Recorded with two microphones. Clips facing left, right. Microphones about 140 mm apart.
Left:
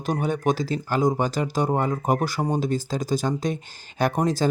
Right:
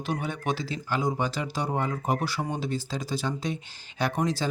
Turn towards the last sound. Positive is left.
turn(degrees=45)  # may be behind; listen again after turning